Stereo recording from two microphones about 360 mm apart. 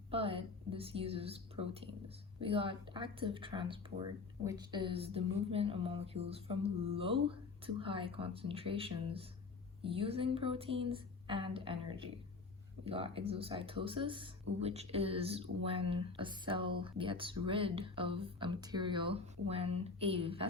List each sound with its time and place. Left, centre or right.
0.1 s speech: centre